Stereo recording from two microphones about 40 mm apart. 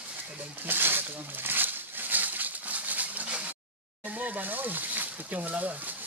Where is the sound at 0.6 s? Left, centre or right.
Right.